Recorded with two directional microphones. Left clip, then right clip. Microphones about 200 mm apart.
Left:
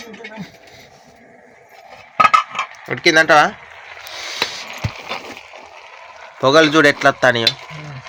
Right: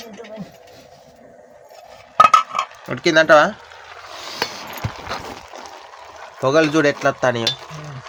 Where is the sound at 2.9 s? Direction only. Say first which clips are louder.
Left 1 dB; 25° right (ahead or behind).